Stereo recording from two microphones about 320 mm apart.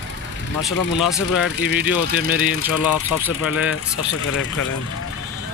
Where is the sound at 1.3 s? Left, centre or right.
Left.